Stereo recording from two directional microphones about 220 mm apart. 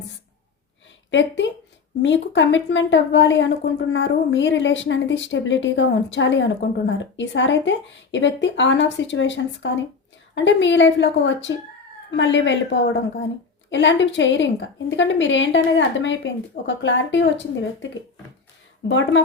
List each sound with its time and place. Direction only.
2.0 s speech: 55° left (ahead or behind)
18.9 s speech: 55° left (ahead or behind)